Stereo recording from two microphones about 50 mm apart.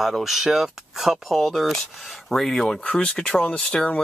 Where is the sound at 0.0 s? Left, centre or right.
Centre.